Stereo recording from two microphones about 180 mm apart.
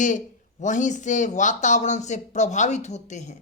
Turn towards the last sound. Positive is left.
turn(degrees=40)  # may be behind; listen again after turning